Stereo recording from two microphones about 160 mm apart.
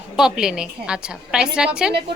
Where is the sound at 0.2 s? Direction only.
5° right (ahead or behind).